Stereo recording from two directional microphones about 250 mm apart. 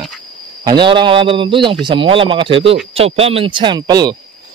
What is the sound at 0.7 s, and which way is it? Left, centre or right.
A man's voice, centre.